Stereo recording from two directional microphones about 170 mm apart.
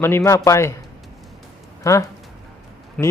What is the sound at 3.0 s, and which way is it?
Speech, 5° left (ahead or behind).